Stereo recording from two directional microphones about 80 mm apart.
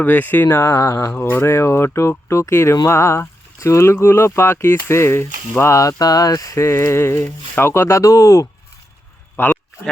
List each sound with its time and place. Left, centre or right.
0.0 s speech: left
1.1 s speech: left
6.7 s speech: left
9.4 s speech: left